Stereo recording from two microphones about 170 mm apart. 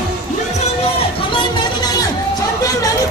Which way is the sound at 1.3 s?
25° left (ahead or behind).